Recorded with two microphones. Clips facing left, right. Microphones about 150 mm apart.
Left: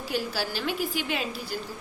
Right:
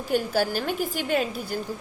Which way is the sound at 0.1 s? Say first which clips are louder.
Right 7 dB; 50° right (ahead or behind).